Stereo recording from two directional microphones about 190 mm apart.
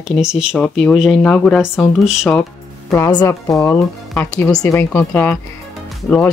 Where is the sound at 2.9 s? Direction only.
20° left (ahead or behind).